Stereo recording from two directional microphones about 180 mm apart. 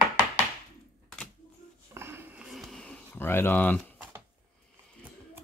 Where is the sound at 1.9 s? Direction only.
15° right (ahead or behind); by 3.8 s 10° left (ahead or behind).